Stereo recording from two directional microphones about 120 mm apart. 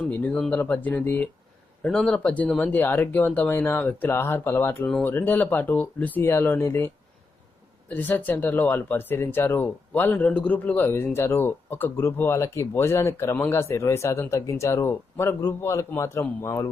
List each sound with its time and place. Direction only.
0.1 s speech: 10° left (ahead or behind)